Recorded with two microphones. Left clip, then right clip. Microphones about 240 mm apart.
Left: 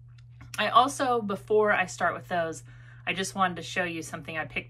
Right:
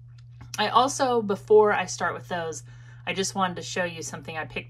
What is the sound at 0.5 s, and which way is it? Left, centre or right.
Speech, centre.